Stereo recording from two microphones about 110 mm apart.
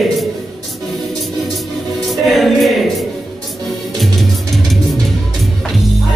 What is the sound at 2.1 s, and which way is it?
Music, centre (ahead or behind).